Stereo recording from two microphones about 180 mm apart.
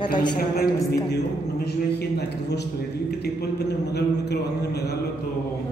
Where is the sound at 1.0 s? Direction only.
65° left (ahead or behind).